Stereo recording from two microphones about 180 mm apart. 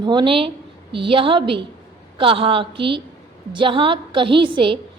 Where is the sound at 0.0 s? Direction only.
25° right (ahead or behind).